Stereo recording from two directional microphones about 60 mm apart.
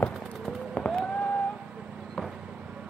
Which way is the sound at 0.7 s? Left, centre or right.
Centre.